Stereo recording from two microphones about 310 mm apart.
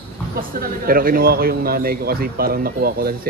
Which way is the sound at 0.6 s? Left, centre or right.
Right.